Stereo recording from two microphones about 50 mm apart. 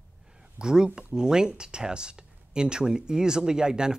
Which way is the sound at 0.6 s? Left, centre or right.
Centre.